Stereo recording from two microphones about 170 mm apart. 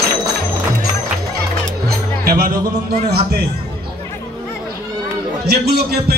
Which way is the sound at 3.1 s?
70° right (ahead or behind).